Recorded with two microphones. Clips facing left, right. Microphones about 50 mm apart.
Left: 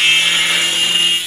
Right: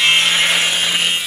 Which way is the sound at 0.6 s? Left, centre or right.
Right.